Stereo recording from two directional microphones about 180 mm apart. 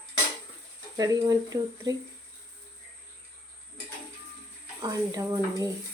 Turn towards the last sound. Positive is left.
turn(degrees=-20)  # may be behind; listen again after turning